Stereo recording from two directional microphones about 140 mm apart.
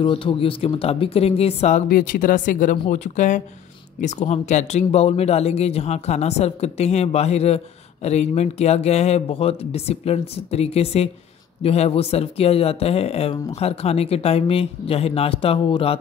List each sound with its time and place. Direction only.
0.0 s speech: 40° left (ahead or behind)
1.9 s speech: 85° left
2.9 s speech: 60° left (ahead or behind); by 16.0 s 40° left (ahead or behind)